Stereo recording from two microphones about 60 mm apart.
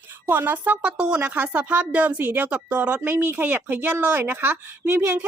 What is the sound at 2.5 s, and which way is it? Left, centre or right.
Speech, centre.